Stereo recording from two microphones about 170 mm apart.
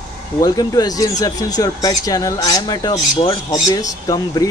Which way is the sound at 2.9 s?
40° left (ahead or behind).